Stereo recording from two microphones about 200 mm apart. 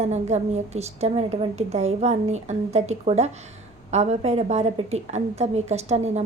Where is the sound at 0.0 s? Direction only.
35° right (ahead or behind).